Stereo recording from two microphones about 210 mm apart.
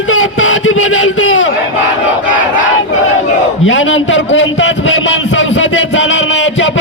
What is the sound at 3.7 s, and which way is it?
A man's voice, 65° left (ahead or behind).